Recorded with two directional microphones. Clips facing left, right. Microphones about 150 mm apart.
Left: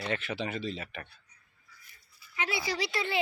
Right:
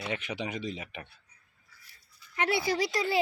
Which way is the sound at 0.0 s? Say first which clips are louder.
Left 1 dB; 15° right (ahead or behind).